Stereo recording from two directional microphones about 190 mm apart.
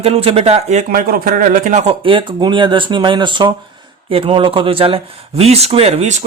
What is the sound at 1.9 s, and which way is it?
Speech, 25° right (ahead or behind).